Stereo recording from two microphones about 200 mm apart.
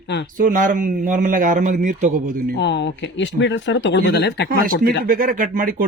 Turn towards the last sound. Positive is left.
turn(degrees=-45)  # may be behind; listen again after turning